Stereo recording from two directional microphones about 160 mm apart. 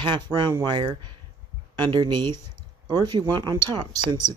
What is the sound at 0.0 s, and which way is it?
Speech, 30° right (ahead or behind).